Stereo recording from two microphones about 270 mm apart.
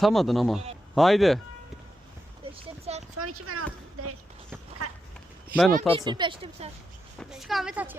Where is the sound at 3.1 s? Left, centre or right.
Right.